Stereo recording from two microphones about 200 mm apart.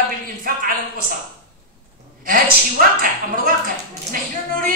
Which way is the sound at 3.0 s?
45° right (ahead or behind).